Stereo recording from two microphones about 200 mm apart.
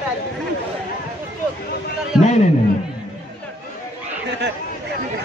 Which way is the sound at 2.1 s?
5° right (ahead or behind).